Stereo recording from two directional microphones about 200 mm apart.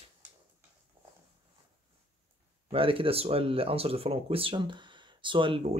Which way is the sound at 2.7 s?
25° right (ahead or behind).